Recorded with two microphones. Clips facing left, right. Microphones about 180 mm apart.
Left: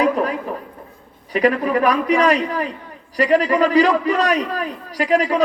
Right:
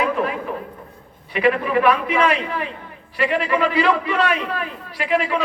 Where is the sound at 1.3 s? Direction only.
40° left (ahead or behind).